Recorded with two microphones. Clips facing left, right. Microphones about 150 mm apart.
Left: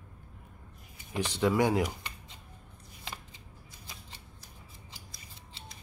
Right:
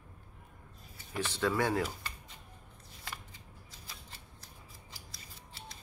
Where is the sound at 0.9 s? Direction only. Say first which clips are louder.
Left 4 dB; 15° left (ahead or behind).